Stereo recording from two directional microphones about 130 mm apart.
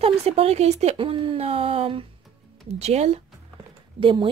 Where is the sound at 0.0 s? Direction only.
50° right (ahead or behind).